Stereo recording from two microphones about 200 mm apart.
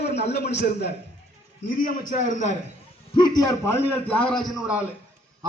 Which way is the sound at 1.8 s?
40° left (ahead or behind).